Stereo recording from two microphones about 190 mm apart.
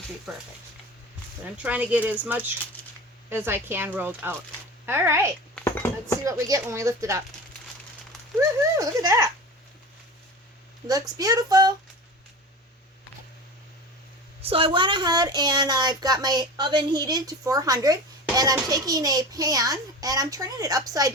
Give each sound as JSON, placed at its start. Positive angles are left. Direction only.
{"t": 0.3, "sound": "speech", "side_deg": 0}
{"t": 1.5, "sound": "speech", "side_deg": -5}
{"t": 5.5, "sound": "a sound", "side_deg": 10}
{"t": 6.2, "sound": "speech", "side_deg": -15}
{"t": 8.4, "sound": "speech", "side_deg": -15}
{"t": 10.8, "sound": "speech", "side_deg": -20}
{"t": 14.4, "sound": "speech", "side_deg": -30}